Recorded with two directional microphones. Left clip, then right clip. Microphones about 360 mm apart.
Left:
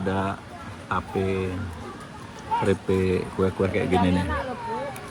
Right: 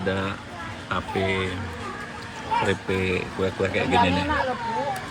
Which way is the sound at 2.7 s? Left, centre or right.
Centre.